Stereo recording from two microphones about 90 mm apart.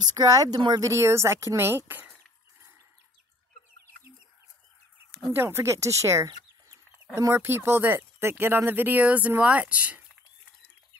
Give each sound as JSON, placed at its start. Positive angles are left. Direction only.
{"t": 0.0, "sound": "speech", "side_deg": -45}
{"t": 0.7, "sound": "speech", "side_deg": -35}
{"t": 5.3, "sound": "speech", "side_deg": -25}